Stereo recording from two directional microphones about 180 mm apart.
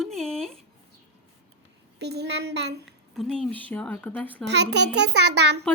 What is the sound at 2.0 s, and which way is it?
Speech, 65° right (ahead or behind).